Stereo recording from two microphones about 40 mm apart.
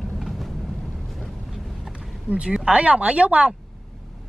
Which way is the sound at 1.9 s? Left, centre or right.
Right.